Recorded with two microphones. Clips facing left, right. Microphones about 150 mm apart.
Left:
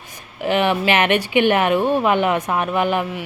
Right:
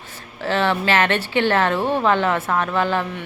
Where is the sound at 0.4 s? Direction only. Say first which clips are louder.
Left 2 dB; 15° left (ahead or behind).